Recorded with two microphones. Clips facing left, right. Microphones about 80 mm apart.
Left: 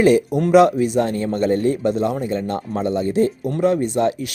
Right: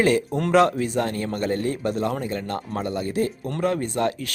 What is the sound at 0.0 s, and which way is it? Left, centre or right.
A man's voice, centre.